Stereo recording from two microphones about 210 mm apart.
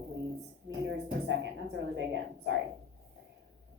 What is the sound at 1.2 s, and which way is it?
A woman's voice, 60° right (ahead or behind).